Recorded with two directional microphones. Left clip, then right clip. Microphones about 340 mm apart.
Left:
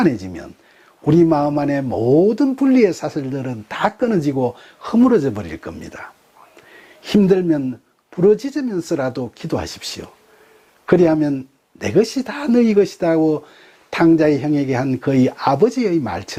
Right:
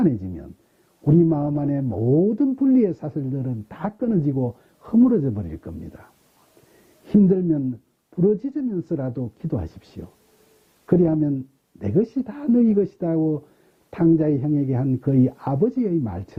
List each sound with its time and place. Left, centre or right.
0.0 s speech: centre
1.9 s speech: left
2.4 s speech: centre
13.2 s speech: centre
13.9 s speech: centre